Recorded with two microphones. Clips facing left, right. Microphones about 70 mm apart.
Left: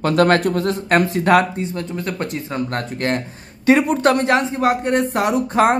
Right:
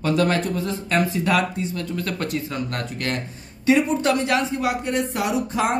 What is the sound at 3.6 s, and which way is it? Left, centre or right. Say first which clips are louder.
Speech: left 4 dB; left.